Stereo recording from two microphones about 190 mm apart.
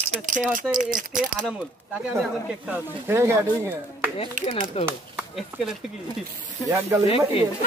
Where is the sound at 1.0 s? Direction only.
45° right (ahead or behind).